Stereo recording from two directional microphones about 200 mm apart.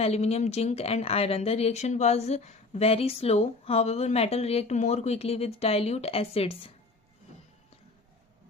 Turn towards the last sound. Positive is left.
turn(degrees=30)  # may be behind; listen again after turning